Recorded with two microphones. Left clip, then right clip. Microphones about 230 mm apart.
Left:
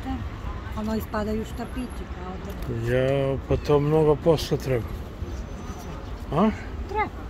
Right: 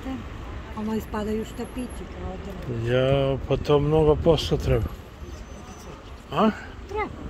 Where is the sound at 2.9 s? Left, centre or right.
Centre.